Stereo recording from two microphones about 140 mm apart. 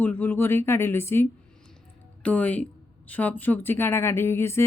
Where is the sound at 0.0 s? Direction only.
15° left (ahead or behind).